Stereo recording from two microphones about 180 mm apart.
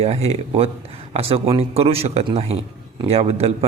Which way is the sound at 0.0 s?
35° right (ahead or behind).